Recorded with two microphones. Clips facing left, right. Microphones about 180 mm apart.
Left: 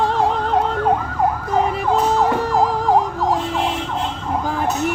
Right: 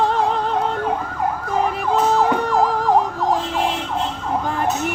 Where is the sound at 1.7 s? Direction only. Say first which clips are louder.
Even; centre (ahead or behind).